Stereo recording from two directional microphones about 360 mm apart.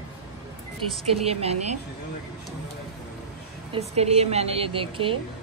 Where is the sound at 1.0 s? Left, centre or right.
Centre.